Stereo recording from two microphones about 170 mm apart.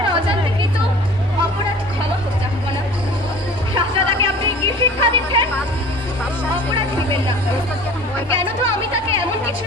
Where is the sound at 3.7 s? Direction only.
30° right (ahead or behind).